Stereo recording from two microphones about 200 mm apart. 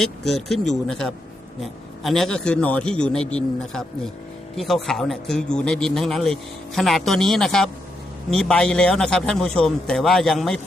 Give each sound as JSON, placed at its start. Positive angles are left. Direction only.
{"t": 0.0, "sound": "speech", "side_deg": 0}